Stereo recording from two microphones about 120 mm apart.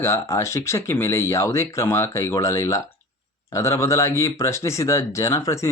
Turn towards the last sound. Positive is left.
turn(degrees=25)  # may be behind; listen again after turning